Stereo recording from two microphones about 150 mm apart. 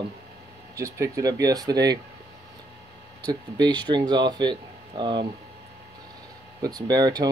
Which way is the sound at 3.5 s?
30° right (ahead or behind).